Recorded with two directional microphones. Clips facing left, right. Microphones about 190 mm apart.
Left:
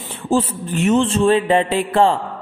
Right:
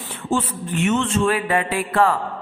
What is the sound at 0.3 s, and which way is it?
A man's voice, 35° left (ahead or behind).